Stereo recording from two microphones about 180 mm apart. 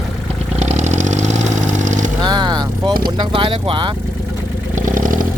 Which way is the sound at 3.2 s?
30° right (ahead or behind).